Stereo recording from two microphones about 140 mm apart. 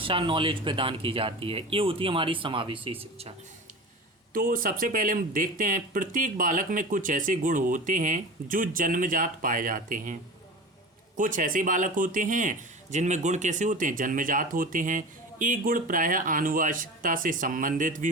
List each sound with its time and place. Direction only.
0.0 s speech: 40° right (ahead or behind)
4.4 s speech: 90° right; by 10.2 s 70° right (ahead or behind)
11.2 s speech: 70° right (ahead or behind)